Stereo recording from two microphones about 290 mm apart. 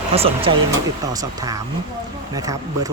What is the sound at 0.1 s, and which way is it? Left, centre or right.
Speech, centre.